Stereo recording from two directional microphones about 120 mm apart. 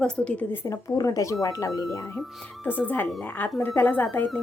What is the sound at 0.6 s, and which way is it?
A woman's voice, 25° left (ahead or behind).